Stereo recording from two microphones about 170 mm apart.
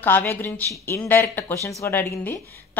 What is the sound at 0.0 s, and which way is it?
Speech, 10° left (ahead or behind).